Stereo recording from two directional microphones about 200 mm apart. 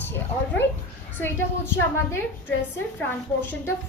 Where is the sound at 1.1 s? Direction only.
10° left (ahead or behind).